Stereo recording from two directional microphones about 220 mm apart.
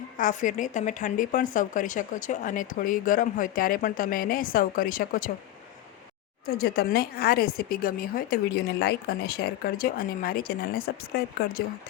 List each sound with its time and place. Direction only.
0.2 s a woman's voice: 35° left (ahead or behind)
6.4 s speech: 45° left (ahead or behind)